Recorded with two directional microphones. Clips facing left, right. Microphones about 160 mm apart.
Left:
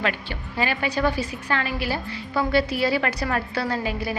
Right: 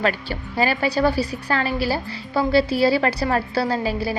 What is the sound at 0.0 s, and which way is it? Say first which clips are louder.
A woman's voice: right 4 dB; 35° right (ahead or behind).